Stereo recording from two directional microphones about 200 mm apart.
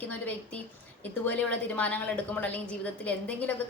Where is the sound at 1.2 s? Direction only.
5° left (ahead or behind).